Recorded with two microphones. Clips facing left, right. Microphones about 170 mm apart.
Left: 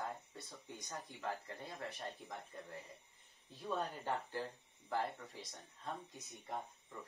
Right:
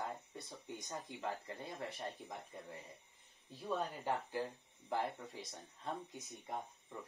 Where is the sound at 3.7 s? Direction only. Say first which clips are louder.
Right 1 dB; 15° right (ahead or behind).